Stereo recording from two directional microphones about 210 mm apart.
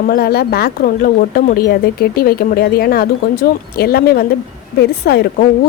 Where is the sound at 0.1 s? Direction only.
50° left (ahead or behind).